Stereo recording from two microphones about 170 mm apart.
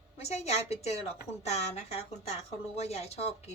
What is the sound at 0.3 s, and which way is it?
A woman's voice, 40° left (ahead or behind).